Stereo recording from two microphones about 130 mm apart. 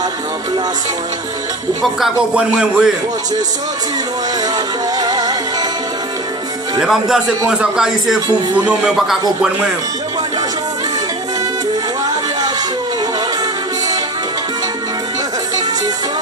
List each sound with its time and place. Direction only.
1.8 s a man's voice: 5° right (ahead or behind)
4.5 s music: 30° right (ahead or behind)
6.7 s a man's voice: 5° right (ahead or behind)